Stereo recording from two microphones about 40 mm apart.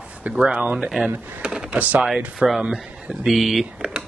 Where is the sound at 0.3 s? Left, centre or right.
Right.